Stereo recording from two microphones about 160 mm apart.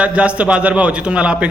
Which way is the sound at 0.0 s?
5° right (ahead or behind).